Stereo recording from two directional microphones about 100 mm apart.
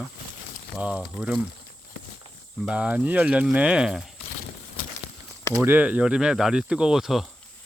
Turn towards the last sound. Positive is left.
turn(degrees=-5)  # may be behind; listen again after turning